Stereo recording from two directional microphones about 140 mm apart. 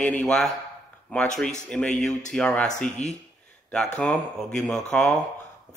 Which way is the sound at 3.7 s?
5° left (ahead or behind).